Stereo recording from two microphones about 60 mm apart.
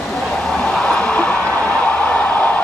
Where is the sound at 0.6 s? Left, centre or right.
Centre.